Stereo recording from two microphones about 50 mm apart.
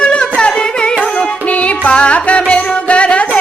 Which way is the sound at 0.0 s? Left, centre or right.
Left.